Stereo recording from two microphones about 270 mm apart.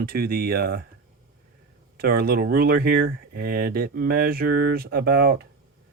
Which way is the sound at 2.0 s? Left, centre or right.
Right.